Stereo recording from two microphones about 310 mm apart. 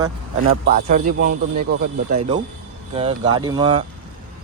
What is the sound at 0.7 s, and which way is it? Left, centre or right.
Speech, right.